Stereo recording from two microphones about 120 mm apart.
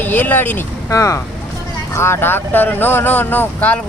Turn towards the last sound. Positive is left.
turn(degrees=15)  # may be behind; listen again after turning